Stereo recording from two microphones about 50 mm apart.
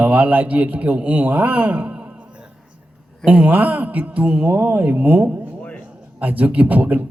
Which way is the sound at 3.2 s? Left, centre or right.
Right.